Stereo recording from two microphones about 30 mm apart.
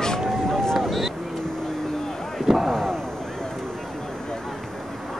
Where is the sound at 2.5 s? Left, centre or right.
Right.